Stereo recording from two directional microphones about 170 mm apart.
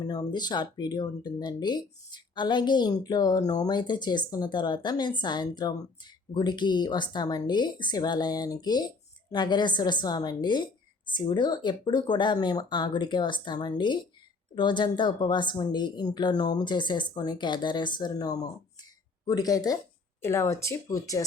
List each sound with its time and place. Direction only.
0.0 s speech: 25° left (ahead or behind)